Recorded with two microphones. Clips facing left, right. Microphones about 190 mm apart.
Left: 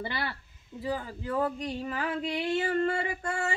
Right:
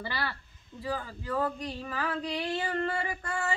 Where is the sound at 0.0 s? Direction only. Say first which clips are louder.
Left 1 dB; 20° left (ahead or behind).